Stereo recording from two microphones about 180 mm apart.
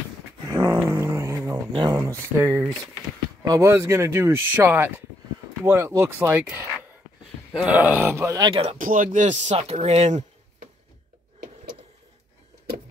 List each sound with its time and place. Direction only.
0.5 s a sound: 15° right (ahead or behind)
2.0 s speech: 15° right (ahead or behind)
8.4 s speech: 30° right (ahead or behind)
8.7 s speech: 45° right (ahead or behind)